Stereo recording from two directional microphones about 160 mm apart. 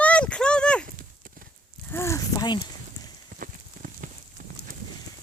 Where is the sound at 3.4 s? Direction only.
60° right (ahead or behind).